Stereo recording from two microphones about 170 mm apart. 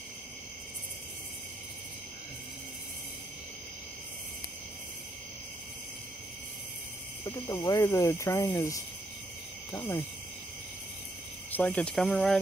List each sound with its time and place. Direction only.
7.2 s speech: 20° left (ahead or behind)
11.5 s speech: 10° left (ahead or behind)